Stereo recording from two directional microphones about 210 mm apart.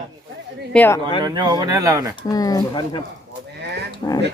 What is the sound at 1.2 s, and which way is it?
Speech, 20° right (ahead or behind).